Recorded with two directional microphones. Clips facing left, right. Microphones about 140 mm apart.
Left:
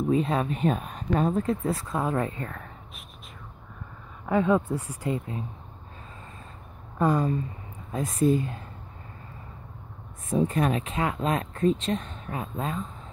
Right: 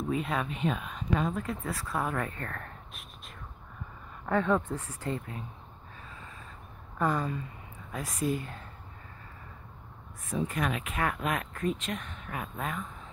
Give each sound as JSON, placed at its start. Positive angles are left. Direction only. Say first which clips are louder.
{"t": 0.1, "sound": "speech", "louder": "left 6 dB", "side_deg": 25}
{"t": 0.5, "sound": "speech", "louder": "left 5 dB", "side_deg": 40}
{"t": 4.3, "sound": "speech", "louder": "left 4 dB", "side_deg": 15}
{"t": 7.0, "sound": "speech", "louder": "left 6 dB", "side_deg": 15}
{"t": 10.3, "sound": "speech", "louder": "left 7 dB", "side_deg": 30}